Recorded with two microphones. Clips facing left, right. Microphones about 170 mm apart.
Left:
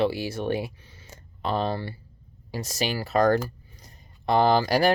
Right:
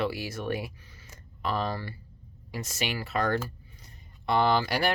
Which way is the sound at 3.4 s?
40° left (ahead or behind).